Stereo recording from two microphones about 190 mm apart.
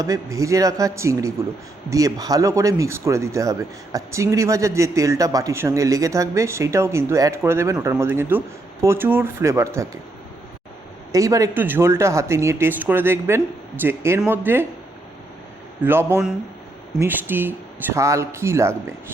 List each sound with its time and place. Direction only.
0.0 s speech: 20° right (ahead or behind)
11.1 s speech: 15° right (ahead or behind)
15.8 s speech: 10° right (ahead or behind)